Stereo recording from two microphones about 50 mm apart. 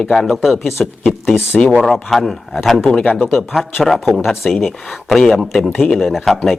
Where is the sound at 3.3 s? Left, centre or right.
Centre.